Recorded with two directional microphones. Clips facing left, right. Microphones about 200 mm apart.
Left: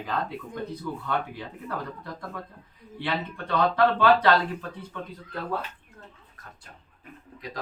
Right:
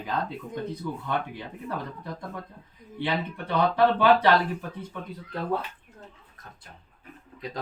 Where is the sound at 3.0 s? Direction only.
15° right (ahead or behind).